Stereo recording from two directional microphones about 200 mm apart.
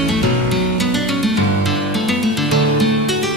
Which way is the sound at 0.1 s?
Centre (ahead or behind).